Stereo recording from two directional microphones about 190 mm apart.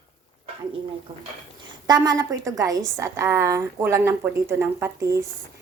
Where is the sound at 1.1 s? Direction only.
35° right (ahead or behind).